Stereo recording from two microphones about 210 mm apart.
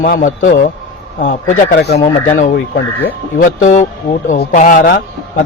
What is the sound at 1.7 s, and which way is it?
Speech, 55° left (ahead or behind).